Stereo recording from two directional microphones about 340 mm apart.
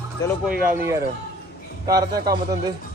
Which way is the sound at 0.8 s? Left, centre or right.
Centre.